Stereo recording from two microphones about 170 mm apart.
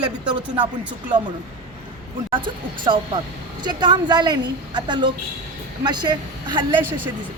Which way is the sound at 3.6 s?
25° right (ahead or behind).